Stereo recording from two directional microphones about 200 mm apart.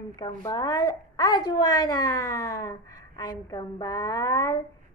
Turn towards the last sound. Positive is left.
turn(degrees=20)  # may be behind; listen again after turning